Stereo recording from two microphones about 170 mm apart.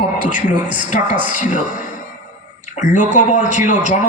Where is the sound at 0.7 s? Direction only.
50° left (ahead or behind).